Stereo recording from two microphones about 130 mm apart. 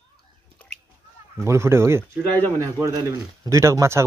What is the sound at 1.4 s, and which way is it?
Speech, 20° right (ahead or behind).